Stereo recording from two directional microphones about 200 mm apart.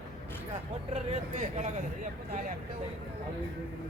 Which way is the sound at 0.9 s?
35° right (ahead or behind).